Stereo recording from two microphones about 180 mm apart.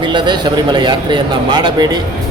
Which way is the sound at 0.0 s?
25° right (ahead or behind).